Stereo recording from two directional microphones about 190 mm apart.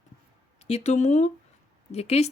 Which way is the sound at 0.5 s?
35° left (ahead or behind).